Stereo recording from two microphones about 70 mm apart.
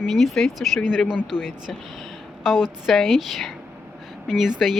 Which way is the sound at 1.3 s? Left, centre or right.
Left.